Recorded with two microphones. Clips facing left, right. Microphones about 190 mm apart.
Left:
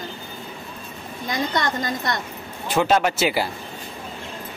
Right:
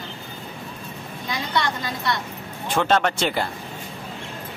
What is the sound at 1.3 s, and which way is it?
Speech, 45° left (ahead or behind).